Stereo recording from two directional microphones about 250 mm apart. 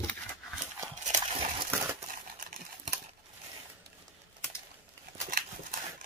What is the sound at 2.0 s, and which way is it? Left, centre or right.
Crumpling, right.